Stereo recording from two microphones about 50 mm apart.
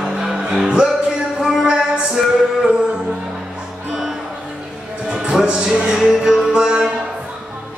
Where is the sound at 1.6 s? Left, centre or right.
Right.